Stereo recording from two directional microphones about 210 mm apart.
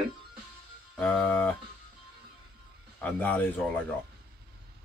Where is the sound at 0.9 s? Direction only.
5° left (ahead or behind).